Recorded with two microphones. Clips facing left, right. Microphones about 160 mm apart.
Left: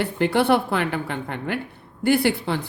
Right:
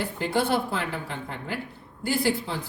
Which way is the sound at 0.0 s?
65° left (ahead or behind).